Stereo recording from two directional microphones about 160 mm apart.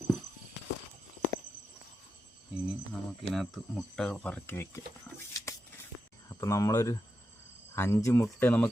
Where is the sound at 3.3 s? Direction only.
Centre (ahead or behind).